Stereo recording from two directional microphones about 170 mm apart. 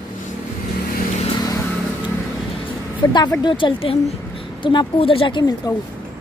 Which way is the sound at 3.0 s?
25° left (ahead or behind).